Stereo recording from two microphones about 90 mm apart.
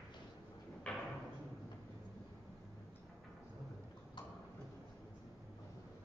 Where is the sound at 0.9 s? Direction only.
10° left (ahead or behind).